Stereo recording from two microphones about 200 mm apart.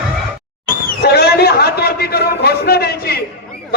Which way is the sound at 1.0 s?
55° left (ahead or behind).